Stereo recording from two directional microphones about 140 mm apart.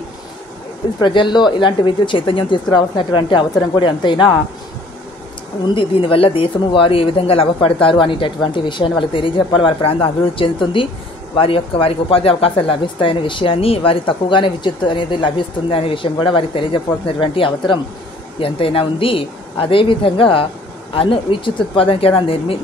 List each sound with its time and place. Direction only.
1.0 s speech: 35° left (ahead or behind)
5.8 s speech: 40° left (ahead or behind)